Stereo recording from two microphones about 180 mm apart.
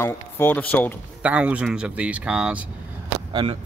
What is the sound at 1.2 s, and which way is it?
Speech, 5° right (ahead or behind).